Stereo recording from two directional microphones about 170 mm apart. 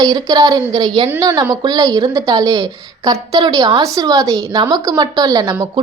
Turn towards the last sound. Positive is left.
turn(degrees=-20)  # may be behind; listen again after turning